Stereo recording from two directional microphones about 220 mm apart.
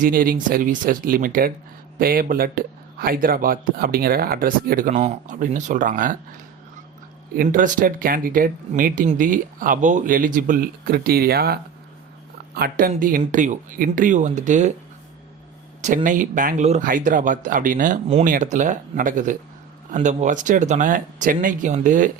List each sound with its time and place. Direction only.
0.0 s speech: 40° right (ahead or behind)
15.8 s speech: 35° right (ahead or behind)